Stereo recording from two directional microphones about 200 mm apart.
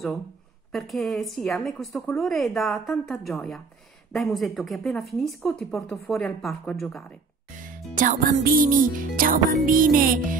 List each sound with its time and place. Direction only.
0.7 s speech: centre (ahead or behind)
7.5 s speech: 40° right (ahead or behind)